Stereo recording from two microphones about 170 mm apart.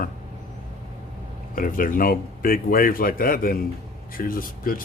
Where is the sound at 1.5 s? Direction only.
55° left (ahead or behind).